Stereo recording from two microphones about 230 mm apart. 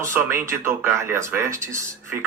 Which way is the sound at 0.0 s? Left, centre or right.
Centre.